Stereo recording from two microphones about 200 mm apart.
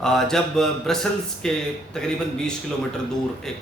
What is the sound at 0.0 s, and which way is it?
Speech, centre (ahead or behind).